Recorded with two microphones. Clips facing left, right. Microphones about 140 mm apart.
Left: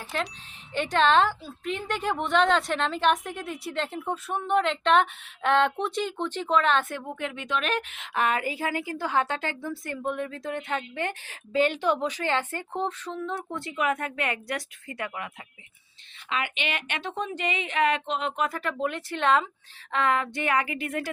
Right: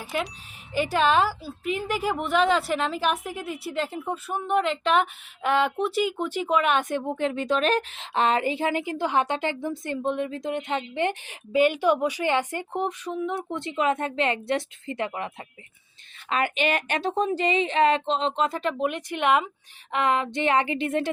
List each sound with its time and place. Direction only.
0.2 s speech: 5° right (ahead or behind)
7.0 s a woman's voice: 30° right (ahead or behind)
16.3 s a woman's voice: 45° right (ahead or behind); by 21.1 s 25° right (ahead or behind)